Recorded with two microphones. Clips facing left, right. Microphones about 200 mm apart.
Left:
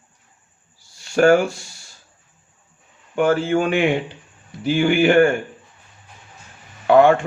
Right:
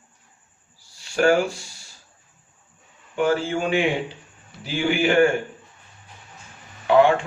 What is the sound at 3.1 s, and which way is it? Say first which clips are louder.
Speech: left 4 dB; 55° left (ahead or behind).